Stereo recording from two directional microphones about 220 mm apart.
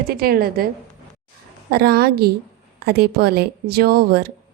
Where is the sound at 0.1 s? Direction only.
45° right (ahead or behind).